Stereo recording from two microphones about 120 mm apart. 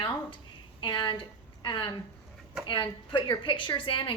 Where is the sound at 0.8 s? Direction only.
40° left (ahead or behind).